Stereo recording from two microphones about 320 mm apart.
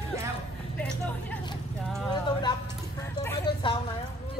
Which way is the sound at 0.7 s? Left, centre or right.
Centre.